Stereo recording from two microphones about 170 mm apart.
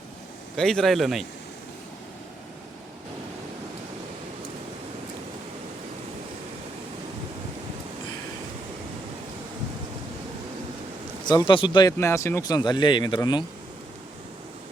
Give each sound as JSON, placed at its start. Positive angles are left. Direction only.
{"t": 0.5, "sound": "a man's voice", "side_deg": 5}
{"t": 11.3, "sound": "speech", "side_deg": 30}